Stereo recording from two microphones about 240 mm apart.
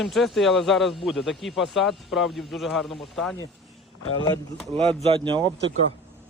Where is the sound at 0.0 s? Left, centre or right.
Centre.